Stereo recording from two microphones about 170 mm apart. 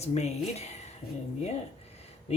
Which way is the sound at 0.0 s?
40° left (ahead or behind).